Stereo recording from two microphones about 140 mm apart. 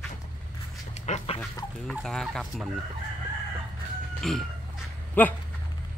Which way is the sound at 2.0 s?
5° left (ahead or behind).